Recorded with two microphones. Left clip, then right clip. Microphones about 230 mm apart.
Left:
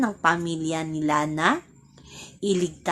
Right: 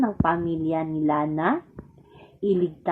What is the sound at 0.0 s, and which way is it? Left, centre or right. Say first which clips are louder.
A woman's voice: left 1 dB; left.